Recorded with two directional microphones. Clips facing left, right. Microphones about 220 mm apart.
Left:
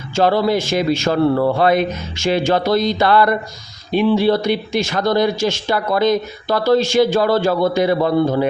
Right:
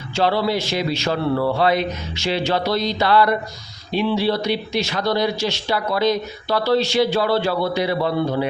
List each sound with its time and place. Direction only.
0.2 s speech: 45° left (ahead or behind)